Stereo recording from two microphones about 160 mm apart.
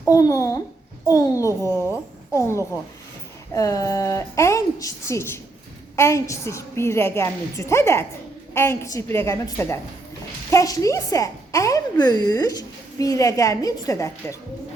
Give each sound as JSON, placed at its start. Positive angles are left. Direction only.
{"t": 0.1, "sound": "a woman's voice", "side_deg": 20}